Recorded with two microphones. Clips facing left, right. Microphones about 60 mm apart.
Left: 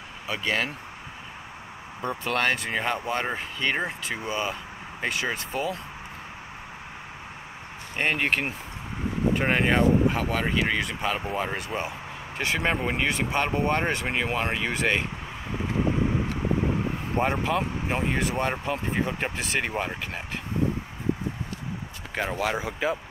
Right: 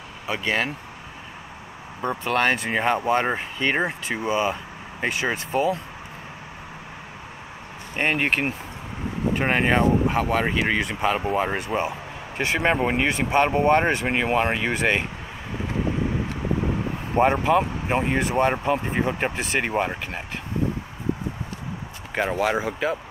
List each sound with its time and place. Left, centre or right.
0.3 s speech: centre
2.0 s speech: centre
5.5 s speech: right
7.9 s speech: centre
17.2 s speech: centre
17.5 s speech: centre
22.1 s speech: centre